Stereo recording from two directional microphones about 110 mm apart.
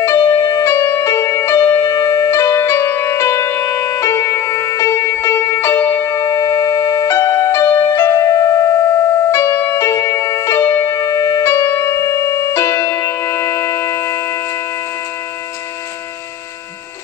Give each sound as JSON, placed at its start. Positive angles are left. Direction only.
{"t": 0.3, "sound": "music", "side_deg": 30}